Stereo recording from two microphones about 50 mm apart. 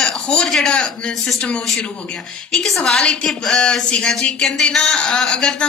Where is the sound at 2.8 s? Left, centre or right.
Centre.